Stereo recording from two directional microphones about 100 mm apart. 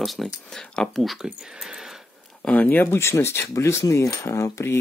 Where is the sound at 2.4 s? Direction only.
15° left (ahead or behind).